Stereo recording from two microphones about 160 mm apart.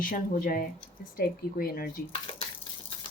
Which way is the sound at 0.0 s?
60° left (ahead or behind).